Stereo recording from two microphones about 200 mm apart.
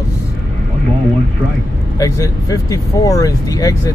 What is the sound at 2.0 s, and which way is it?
Speech, 15° left (ahead or behind).